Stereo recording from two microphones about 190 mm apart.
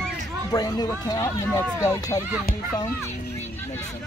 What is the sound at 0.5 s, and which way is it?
Speech, 20° left (ahead or behind).